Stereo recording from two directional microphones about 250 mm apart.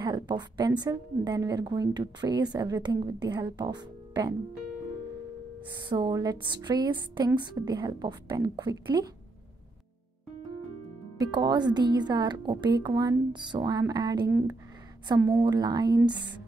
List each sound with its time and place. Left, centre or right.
0.0 s a woman's voice: centre
5.8 s a woman's voice: centre
11.1 s a woman's voice: centre